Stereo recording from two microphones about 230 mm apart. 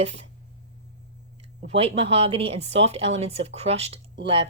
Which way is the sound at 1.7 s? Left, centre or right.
Right.